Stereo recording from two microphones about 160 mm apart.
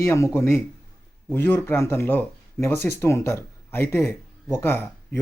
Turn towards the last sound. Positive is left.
turn(degrees=15)  # may be behind; listen again after turning